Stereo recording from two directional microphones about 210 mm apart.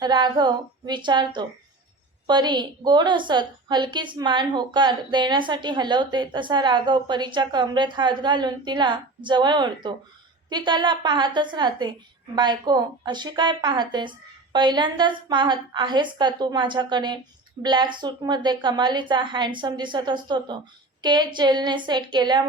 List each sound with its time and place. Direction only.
0.0 s a woman's voice: 20° right (ahead or behind)